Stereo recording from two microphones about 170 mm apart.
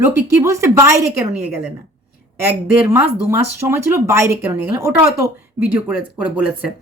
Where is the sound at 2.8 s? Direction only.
10° right (ahead or behind).